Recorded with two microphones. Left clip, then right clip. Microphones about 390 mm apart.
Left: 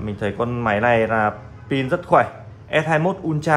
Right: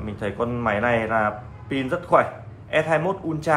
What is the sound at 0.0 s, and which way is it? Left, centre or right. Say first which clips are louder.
A man's voice: left 3 dB; left.